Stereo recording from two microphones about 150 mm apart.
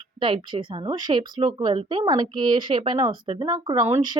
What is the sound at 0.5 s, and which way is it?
Speech, 35° right (ahead or behind).